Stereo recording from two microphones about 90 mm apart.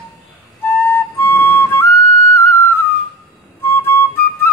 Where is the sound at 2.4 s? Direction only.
25° left (ahead or behind).